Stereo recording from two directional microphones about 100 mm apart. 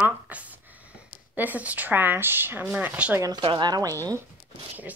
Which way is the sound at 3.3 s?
50° right (ahead or behind).